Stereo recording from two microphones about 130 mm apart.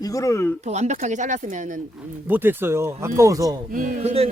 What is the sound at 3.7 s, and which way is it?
Speech, 90° right.